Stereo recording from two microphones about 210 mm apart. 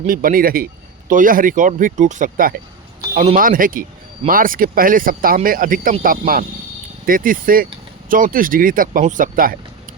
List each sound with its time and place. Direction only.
0.0 s speech: 40° right (ahead or behind)